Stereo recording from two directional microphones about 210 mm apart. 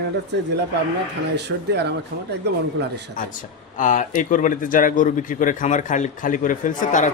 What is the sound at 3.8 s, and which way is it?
A man's voice, 35° left (ahead or behind).